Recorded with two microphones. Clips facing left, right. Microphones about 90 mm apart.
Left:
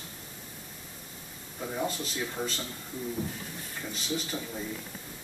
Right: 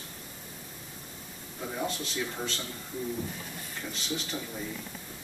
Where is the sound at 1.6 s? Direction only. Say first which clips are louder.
Left 1 dB; 5° left (ahead or behind).